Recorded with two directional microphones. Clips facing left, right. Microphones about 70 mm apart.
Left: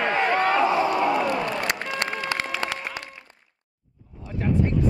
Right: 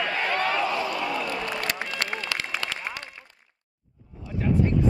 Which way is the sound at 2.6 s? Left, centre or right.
Left.